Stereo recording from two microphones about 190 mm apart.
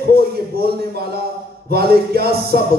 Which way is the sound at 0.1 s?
55° right (ahead or behind).